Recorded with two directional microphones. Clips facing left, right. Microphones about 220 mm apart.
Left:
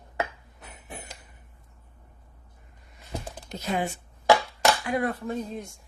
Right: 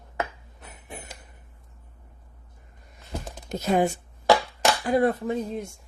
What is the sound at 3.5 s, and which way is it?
Speech, 45° right (ahead or behind).